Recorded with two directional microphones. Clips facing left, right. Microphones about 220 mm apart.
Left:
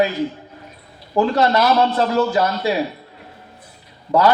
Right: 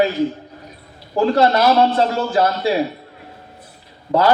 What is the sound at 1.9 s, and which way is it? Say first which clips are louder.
Speech: left 1 dB; 30° right (ahead or behind).